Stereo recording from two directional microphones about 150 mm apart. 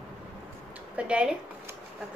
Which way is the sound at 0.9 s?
5° right (ahead or behind).